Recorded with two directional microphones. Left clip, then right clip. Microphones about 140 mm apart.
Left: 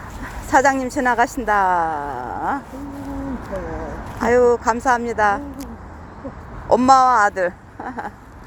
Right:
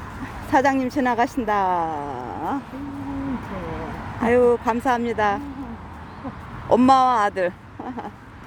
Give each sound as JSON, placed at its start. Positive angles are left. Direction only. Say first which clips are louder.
{"t": 0.5, "sound": "a woman's voice", "louder": "left 3 dB", "side_deg": -20}
{"t": 4.2, "sound": "a woman's voice", "louder": "left 2 dB", "side_deg": -20}
{"t": 6.7, "sound": "a woman's voice", "louder": "left 3 dB", "side_deg": -25}